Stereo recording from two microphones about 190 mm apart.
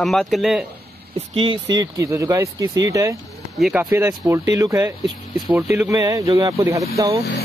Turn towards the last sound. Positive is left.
turn(degrees=-15)  # may be behind; listen again after turning